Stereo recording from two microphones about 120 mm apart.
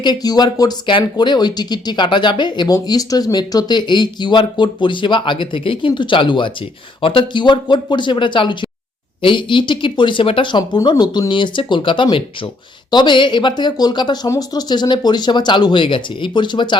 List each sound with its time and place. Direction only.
0.0 s speech: 35° left (ahead or behind)